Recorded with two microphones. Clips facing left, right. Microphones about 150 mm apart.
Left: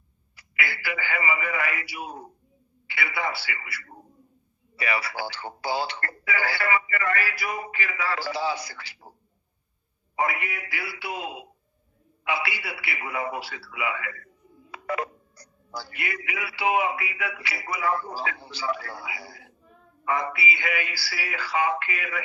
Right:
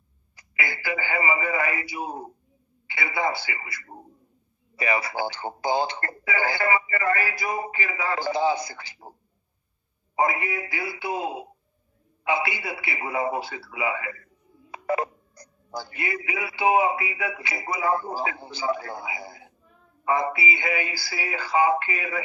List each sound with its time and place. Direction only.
0.4 s a man's voice: 20° right (ahead or behind)
10.1 s speech: 25° right (ahead or behind)
14.7 s telephone dialing: 25° right (ahead or behind)
15.9 s speech: 25° right (ahead or behind)